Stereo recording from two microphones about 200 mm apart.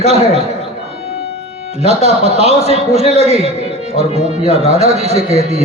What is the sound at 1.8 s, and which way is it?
Speech, 30° right (ahead or behind).